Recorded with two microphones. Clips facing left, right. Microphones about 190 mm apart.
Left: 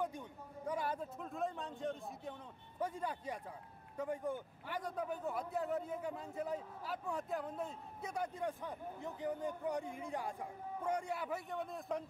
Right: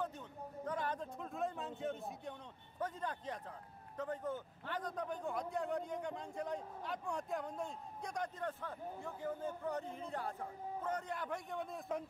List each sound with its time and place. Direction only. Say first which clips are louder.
0.7 s a man's voice: left 2 dB; 10° left (ahead or behind)
2.8 s a man's voice: left 1 dB; 10° left (ahead or behind)